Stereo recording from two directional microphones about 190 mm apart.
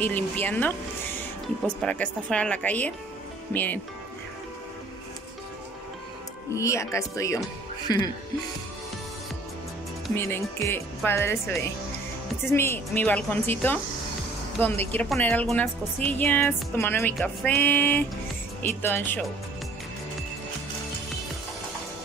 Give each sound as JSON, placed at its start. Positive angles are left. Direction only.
{"t": 0.0, "sound": "a woman's voice", "side_deg": 10}
{"t": 1.8, "sound": "a woman's voice", "side_deg": 5}
{"t": 6.5, "sound": "a woman's voice", "side_deg": 15}
{"t": 10.1, "sound": "a woman's voice", "side_deg": 10}